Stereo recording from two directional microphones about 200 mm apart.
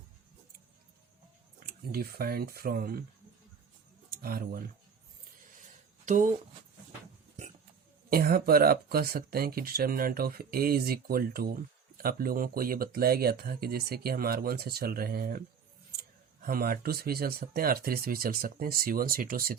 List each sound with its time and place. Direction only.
1.5 s speech: 50° right (ahead or behind)
4.2 s speech: 50° right (ahead or behind)
6.1 s speech: 40° right (ahead or behind)
8.1 s speech: 45° right (ahead or behind)